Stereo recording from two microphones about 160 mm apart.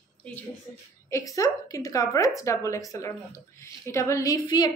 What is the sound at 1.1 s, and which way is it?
A woman's voice, 20° left (ahead or behind).